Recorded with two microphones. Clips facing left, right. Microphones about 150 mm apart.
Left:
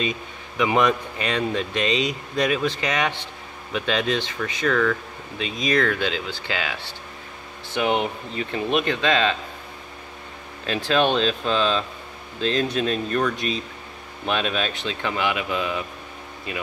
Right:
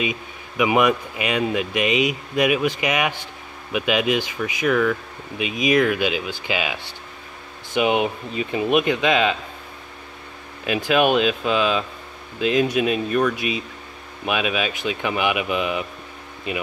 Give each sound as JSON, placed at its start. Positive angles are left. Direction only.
{"t": 0.0, "sound": "speech", "side_deg": -10}
{"t": 10.6, "sound": "speech", "side_deg": -10}